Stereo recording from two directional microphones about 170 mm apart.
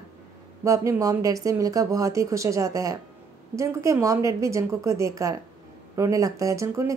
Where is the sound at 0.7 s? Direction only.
20° right (ahead or behind).